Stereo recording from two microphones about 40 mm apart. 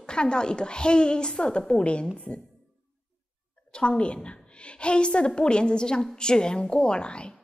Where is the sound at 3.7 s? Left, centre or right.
Left.